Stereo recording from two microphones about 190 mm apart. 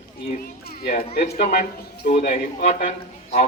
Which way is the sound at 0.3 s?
50° left (ahead or behind).